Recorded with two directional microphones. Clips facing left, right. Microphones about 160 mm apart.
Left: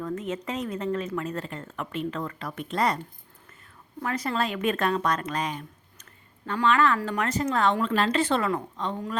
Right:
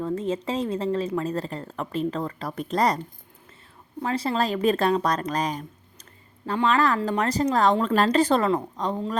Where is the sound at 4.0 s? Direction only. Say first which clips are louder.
Right 3 dB; 30° right (ahead or behind).